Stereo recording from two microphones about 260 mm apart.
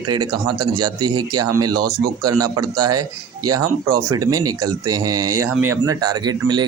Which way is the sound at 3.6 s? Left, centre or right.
Right.